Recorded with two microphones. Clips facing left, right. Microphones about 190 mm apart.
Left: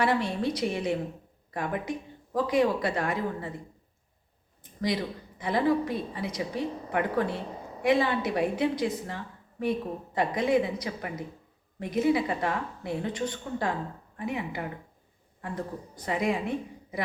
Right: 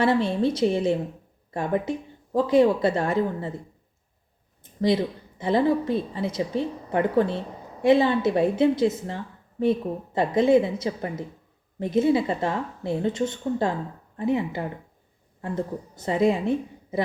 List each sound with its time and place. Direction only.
0.0 s a woman's voice: 25° right (ahead or behind)
4.8 s a woman's voice: 25° right (ahead or behind)